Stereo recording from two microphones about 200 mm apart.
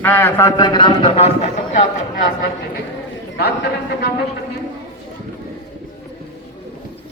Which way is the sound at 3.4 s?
55° left (ahead or behind).